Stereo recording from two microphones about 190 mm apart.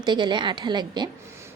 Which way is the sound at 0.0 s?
25° right (ahead or behind).